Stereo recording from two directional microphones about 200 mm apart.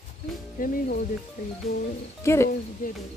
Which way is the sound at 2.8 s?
40° left (ahead or behind).